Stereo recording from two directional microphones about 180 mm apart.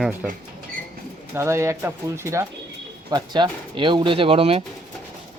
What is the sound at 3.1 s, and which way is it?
Speech, 25° right (ahead or behind).